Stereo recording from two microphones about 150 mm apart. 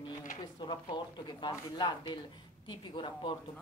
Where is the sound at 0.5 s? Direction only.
30° left (ahead or behind).